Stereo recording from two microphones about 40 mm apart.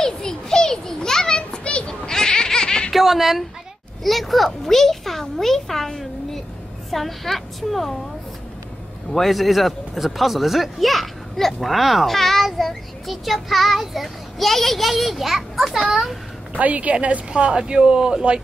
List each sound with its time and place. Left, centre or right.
0.0 s a sound: centre
2.9 s cat: centre
4.0 s speech: centre
9.1 s speech: centre
16.5 s a woman's voice: right